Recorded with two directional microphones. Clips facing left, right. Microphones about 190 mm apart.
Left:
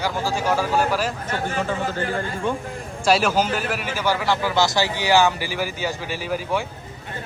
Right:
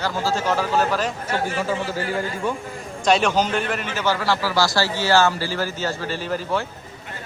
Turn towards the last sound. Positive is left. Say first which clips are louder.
# even
turn(degrees=10)  # may be behind; listen again after turning